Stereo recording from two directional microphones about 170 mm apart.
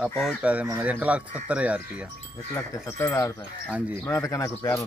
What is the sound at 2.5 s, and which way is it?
Speech, 15° left (ahead or behind).